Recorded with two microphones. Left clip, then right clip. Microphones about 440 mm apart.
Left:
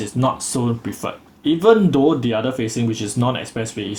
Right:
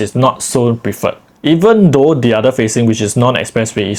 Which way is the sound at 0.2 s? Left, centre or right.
Right.